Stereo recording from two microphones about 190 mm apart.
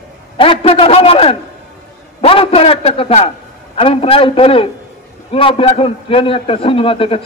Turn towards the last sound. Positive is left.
turn(degrees=30)  # may be behind; listen again after turning